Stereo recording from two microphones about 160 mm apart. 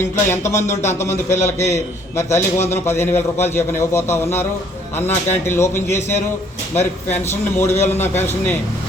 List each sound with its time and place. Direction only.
0.0 s a man's voice: 15° left (ahead or behind)